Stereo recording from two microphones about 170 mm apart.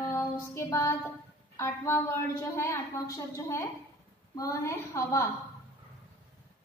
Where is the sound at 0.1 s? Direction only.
15° left (ahead or behind).